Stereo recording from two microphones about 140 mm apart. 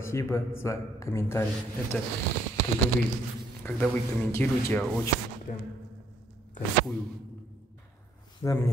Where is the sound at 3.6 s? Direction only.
15° left (ahead or behind).